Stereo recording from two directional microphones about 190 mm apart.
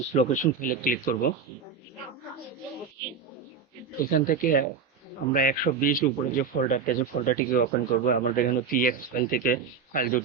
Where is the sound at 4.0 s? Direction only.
45° left (ahead or behind).